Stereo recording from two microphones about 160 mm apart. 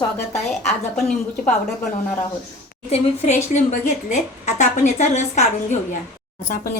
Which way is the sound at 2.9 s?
45° left (ahead or behind).